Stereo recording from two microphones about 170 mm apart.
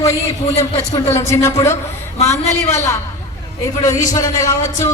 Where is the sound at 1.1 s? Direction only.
15° left (ahead or behind).